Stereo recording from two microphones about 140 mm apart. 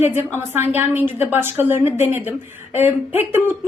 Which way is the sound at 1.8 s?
50° left (ahead or behind).